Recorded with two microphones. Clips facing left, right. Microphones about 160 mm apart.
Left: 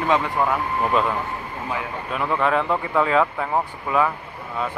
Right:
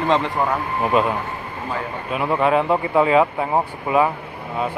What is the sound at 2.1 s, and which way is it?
Speech, 20° right (ahead or behind).